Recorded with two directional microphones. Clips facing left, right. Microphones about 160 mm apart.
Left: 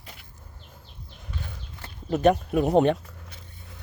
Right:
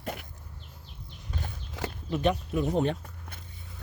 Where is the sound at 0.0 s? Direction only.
55° right (ahead or behind).